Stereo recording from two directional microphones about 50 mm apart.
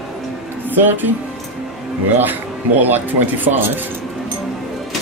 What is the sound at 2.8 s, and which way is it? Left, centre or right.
Speech, right.